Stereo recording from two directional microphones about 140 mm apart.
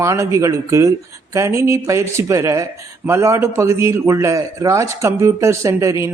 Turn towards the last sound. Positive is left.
turn(degrees=-20)  # may be behind; listen again after turning